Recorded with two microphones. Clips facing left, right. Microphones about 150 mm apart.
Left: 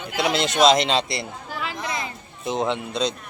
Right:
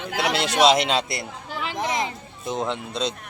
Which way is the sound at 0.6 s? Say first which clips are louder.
Left 1 dB; 10° right (ahead or behind).